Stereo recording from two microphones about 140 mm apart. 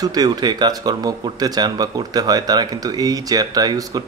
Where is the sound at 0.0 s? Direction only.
30° right (ahead or behind).